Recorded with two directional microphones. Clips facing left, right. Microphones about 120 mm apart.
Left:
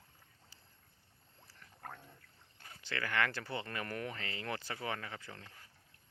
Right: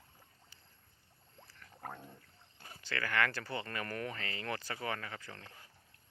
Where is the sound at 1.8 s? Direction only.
20° right (ahead or behind).